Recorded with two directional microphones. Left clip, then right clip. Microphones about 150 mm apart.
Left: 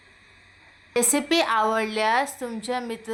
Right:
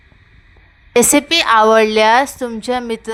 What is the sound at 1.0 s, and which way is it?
A woman's voice, 60° right (ahead or behind).